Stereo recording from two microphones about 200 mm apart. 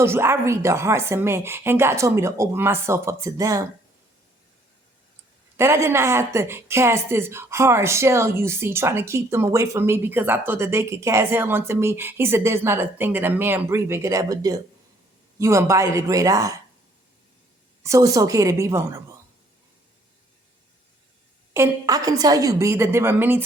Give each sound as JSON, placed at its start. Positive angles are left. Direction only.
{"t": 0.0, "sound": "a woman's voice", "side_deg": -10}
{"t": 5.5, "sound": "a woman's voice", "side_deg": -15}
{"t": 17.8, "sound": "a woman's voice", "side_deg": -15}
{"t": 21.5, "sound": "a woman's voice", "side_deg": -15}